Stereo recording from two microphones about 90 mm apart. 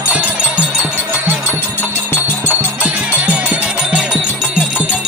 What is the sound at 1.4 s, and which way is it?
Music, 25° left (ahead or behind).